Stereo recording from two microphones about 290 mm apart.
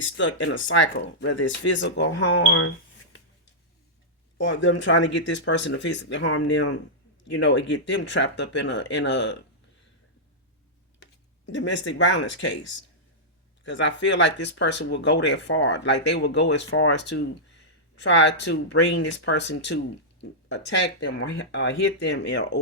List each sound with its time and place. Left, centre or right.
0.0 s speech: left
4.4 s speech: left
11.0 s speech: left